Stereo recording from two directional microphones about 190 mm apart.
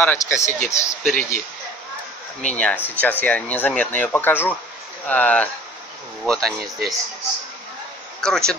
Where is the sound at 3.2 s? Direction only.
10° left (ahead or behind).